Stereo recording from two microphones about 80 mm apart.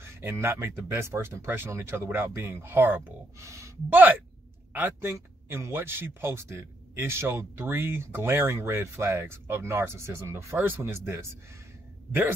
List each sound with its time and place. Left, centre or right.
0.0 s speech: right
3.3 s speech: right
3.9 s speech: right